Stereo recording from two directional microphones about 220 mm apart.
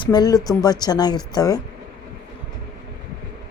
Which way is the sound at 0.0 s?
20° left (ahead or behind).